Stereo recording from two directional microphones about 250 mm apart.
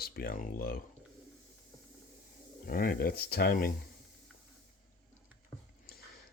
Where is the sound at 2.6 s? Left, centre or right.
Left.